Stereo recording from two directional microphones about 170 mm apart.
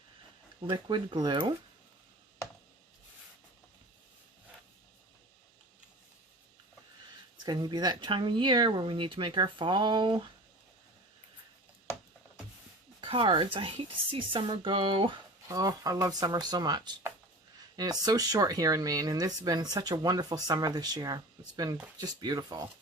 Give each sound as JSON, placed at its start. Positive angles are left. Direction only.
{"t": 0.7, "sound": "a woman's voice", "side_deg": -25}
{"t": 7.4, "sound": "a woman's voice", "side_deg": -25}
{"t": 13.0, "sound": "a woman's voice", "side_deg": -30}